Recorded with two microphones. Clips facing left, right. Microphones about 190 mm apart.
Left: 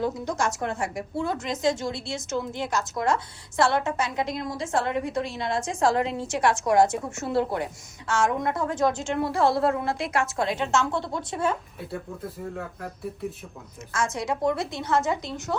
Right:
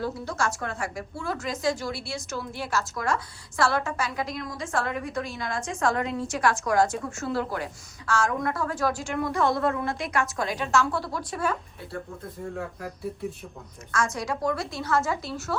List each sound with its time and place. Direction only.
0.0 s a woman's voice: 20° left (ahead or behind)
12.4 s speech: centre (ahead or behind)
13.9 s a woman's voice: 25° left (ahead or behind)